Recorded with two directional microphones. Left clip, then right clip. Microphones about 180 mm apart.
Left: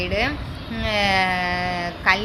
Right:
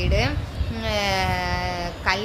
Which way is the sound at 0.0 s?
15° right (ahead or behind).